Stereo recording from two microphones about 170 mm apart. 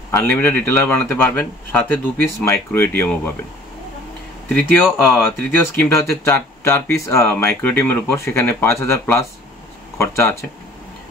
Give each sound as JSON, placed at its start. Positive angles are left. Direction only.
{"t": 0.1, "sound": "speech", "side_deg": 10}
{"t": 4.9, "sound": "speech", "side_deg": 15}